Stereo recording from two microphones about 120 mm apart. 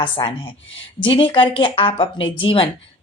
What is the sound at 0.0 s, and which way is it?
Speech, 40° left (ahead or behind).